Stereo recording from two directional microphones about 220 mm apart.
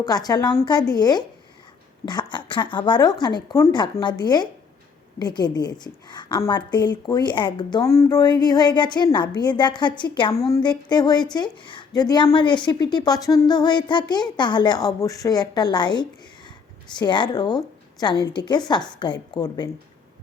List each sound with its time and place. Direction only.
0.0 s a woman's voice: 15° left (ahead or behind)